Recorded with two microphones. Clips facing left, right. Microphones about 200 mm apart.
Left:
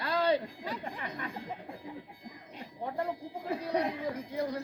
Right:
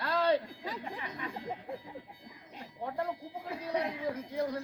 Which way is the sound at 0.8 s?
50° left (ahead or behind).